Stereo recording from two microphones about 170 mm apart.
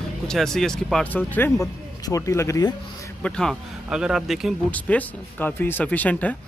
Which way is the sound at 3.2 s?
5° left (ahead or behind).